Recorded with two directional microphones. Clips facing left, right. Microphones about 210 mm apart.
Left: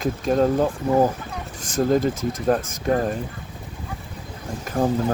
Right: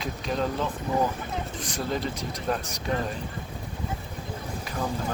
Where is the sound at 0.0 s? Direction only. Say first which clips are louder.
Left 9 dB; 45° left (ahead or behind).